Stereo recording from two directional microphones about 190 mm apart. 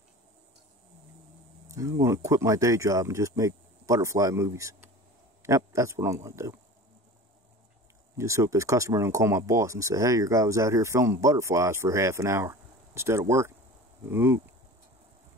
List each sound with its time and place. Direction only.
1.7 s speech: 15° right (ahead or behind)
8.2 s speech: 15° right (ahead or behind)